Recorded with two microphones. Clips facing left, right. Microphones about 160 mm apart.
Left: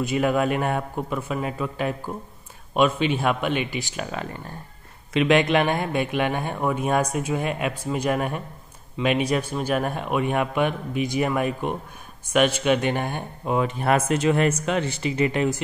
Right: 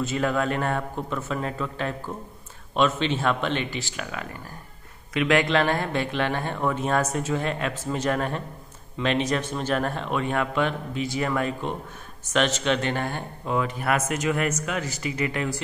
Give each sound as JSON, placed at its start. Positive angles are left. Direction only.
{"t": 0.0, "sound": "speech", "side_deg": 15}
{"t": 4.0, "sound": "speech", "side_deg": 30}